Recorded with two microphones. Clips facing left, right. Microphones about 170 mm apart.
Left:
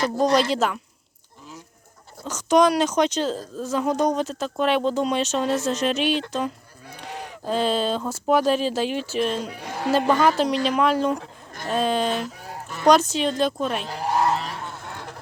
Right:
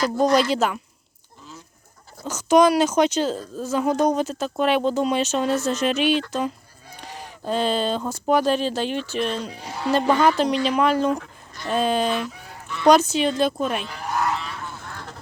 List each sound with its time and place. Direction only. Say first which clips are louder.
0.5 s speech: right 1 dB; centre (ahead or behind)
2.2 s speech: right 2 dB; 5° right (ahead or behind)
6.9 s sheep: left 3 dB; 60° left (ahead or behind)
7.4 s speech: even; centre (ahead or behind)
9.5 s a man's voice: even; 55° left (ahead or behind)
10.1 s speech: right 2 dB; centre (ahead or behind)
12.1 s goose: right 1 dB; 45° left (ahead or behind)
12.9 s speech: right 1 dB; centre (ahead or behind)
13.8 s a sound: left 3 dB; 35° left (ahead or behind)